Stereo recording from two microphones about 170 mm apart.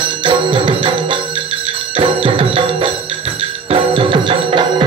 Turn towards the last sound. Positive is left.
turn(degrees=-30)  # may be behind; listen again after turning